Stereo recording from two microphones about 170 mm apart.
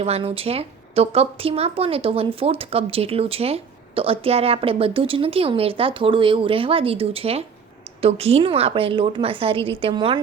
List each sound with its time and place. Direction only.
0.0 s a woman's voice: 35° right (ahead or behind)